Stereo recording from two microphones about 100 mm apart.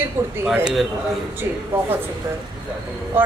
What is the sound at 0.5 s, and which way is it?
Speech, 5° right (ahead or behind).